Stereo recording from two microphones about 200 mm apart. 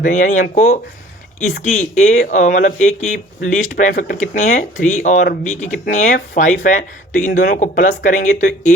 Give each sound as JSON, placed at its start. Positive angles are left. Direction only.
{"t": 0.0, "sound": "speech", "side_deg": 40}